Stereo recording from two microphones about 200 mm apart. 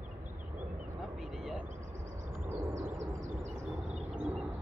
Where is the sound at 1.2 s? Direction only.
Centre (ahead or behind).